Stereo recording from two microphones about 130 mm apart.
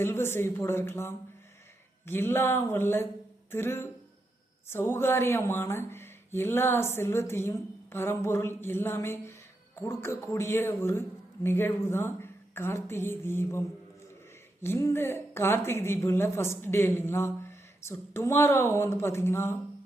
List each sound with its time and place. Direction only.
0.0 s a woman's voice: 20° left (ahead or behind)
2.0 s a sound: 15° left (ahead or behind)
3.5 s a woman's voice: 20° left (ahead or behind)